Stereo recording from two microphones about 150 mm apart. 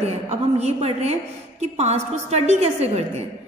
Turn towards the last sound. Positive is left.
turn(degrees=-45)  # may be behind; listen again after turning